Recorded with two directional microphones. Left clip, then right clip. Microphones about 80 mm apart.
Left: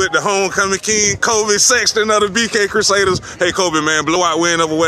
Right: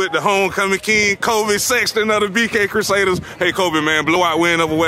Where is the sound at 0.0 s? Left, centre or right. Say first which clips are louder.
Left 2 dB; centre.